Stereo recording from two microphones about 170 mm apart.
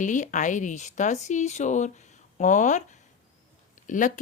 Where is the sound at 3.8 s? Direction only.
50° left (ahead or behind).